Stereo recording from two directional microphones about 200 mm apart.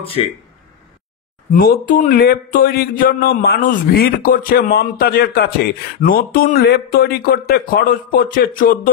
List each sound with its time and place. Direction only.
0.2 s speech: 30° left (ahead or behind)
1.5 s speech: 45° left (ahead or behind)